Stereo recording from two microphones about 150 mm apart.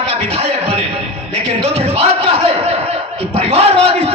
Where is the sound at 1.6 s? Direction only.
40° right (ahead or behind).